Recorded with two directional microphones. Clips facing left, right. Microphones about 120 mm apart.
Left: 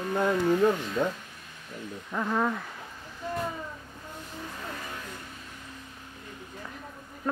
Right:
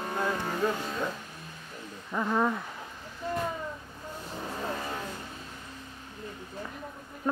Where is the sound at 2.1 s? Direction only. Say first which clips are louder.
Right 1 dB; 5° right (ahead or behind).